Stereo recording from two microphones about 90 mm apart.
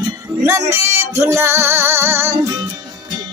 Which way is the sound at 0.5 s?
30° right (ahead or behind).